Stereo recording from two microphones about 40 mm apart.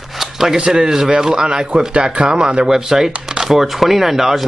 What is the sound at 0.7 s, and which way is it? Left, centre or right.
Speech, centre.